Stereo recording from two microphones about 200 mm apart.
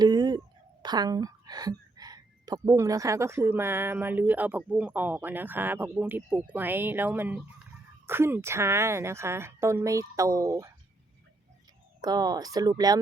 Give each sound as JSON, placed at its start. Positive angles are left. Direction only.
{"t": 0.0, "sound": "a sound", "side_deg": -20}
{"t": 2.6, "sound": "speech", "side_deg": -15}
{"t": 12.0, "sound": "speech", "side_deg": -20}